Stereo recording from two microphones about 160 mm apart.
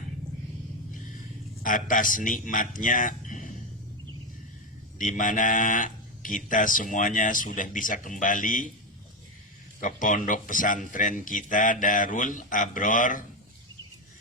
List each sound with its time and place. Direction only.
1.6 s speech: 55° left (ahead or behind)
4.9 s speech: 55° left (ahead or behind)
9.8 s speech: 55° left (ahead or behind)